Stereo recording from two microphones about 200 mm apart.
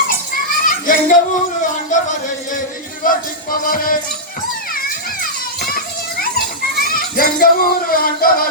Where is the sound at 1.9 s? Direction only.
40° left (ahead or behind).